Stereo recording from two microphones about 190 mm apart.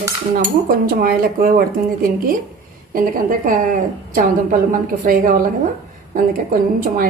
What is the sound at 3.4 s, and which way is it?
Speech, 45° right (ahead or behind).